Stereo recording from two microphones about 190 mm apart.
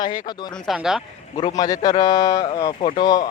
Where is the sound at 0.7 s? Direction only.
Centre (ahead or behind).